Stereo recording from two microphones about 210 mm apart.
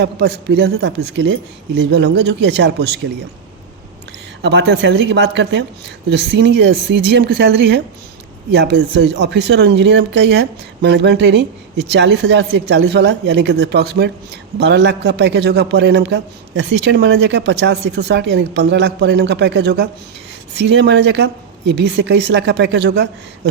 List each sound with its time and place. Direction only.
0.0 s speech: 55° right (ahead or behind)
4.4 s a man's voice: 55° right (ahead or behind)